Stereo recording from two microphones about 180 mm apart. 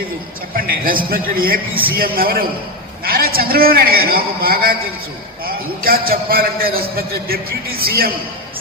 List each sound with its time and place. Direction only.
0.5 s a man's voice: 55° right (ahead or behind)